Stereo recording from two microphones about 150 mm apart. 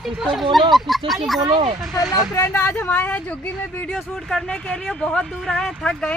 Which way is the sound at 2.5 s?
10° left (ahead or behind).